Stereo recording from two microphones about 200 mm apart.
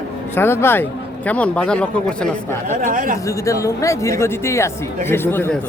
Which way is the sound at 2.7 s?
40° right (ahead or behind).